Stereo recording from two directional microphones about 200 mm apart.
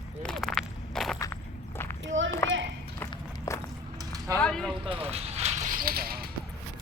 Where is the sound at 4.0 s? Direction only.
20° right (ahead or behind).